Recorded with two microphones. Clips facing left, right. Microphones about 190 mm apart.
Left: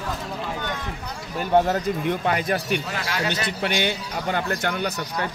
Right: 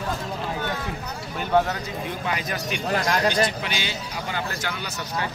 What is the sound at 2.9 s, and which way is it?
Speech, 40° right (ahead or behind).